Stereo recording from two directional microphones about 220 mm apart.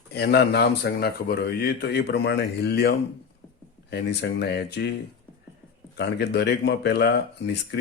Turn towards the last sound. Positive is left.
turn(degrees=50)  # may be behind; listen again after turning